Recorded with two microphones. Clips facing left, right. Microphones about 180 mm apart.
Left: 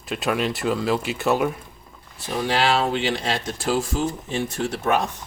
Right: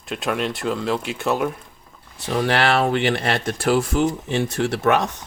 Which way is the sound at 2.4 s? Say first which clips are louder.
Right 2 dB; 65° right (ahead or behind).